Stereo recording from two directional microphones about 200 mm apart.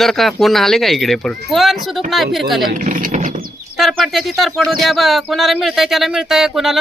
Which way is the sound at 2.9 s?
40° right (ahead or behind).